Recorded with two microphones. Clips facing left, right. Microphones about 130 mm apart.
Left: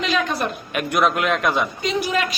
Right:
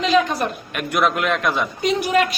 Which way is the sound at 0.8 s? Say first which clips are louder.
Left 1 dB; centre (ahead or behind).